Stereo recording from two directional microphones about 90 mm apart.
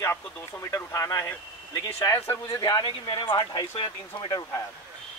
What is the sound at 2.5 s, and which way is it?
Speech, 50° left (ahead or behind).